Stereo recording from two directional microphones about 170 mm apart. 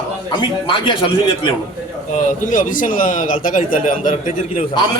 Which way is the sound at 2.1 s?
50° left (ahead or behind).